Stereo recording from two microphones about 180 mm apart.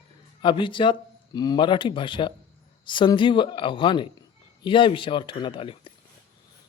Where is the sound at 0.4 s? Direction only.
25° left (ahead or behind).